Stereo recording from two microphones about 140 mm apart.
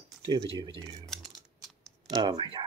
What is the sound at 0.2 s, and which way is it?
Speech, 35° right (ahead or behind).